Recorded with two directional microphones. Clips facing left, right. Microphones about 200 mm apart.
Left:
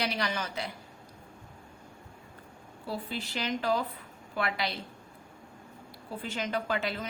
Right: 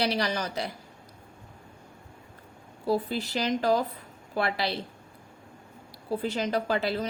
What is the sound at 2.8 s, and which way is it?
Speech, 40° right (ahead or behind).